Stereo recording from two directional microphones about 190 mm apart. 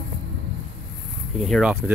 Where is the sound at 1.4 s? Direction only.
Centre (ahead or behind).